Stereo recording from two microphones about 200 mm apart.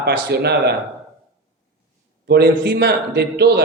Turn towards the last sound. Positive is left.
turn(degrees=-55)  # may be behind; listen again after turning